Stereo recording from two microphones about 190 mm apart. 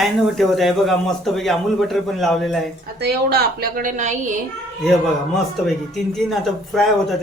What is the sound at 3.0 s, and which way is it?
A woman's voice, 55° right (ahead or behind).